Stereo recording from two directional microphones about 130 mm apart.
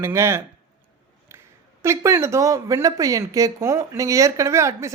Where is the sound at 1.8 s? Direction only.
20° right (ahead or behind).